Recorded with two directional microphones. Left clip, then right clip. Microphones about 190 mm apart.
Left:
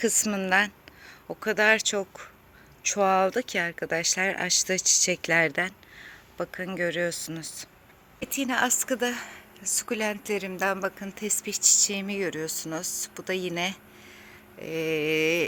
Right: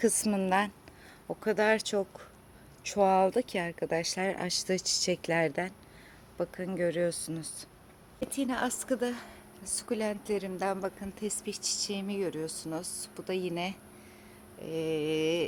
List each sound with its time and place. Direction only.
0.0 s speech: 10° right (ahead or behind)
8.2 s speech: 15° left (ahead or behind)